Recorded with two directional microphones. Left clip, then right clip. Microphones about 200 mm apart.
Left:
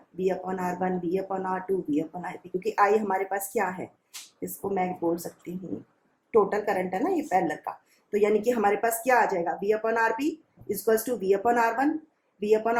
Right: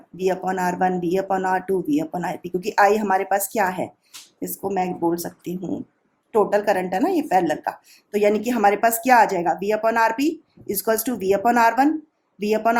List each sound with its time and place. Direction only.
0.2 s a woman's voice: 50° right (ahead or behind)
6.3 s a woman's voice: 55° right (ahead or behind)